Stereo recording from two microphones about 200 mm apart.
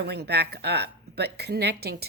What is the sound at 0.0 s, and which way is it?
Speech, 55° right (ahead or behind).